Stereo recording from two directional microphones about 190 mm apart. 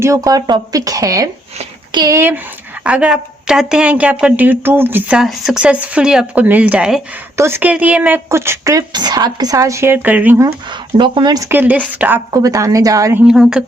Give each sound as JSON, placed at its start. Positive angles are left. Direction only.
{"t": 0.0, "sound": "speech", "side_deg": -15}
{"t": 13.2, "sound": "speech", "side_deg": -5}